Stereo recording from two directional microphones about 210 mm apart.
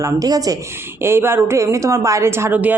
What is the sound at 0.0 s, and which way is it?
A woman's voice, 15° right (ahead or behind).